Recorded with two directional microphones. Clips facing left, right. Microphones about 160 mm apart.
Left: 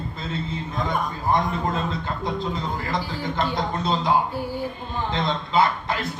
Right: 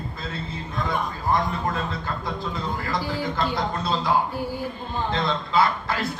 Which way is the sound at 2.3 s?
20° left (ahead or behind).